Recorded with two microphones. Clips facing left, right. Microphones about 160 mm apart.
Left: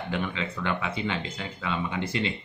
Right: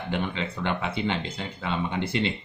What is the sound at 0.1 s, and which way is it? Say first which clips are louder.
Speech: right 2 dB; 25° right (ahead or behind).